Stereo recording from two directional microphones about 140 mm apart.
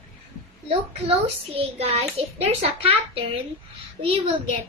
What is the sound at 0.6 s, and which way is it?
A child's voice, 45° right (ahead or behind).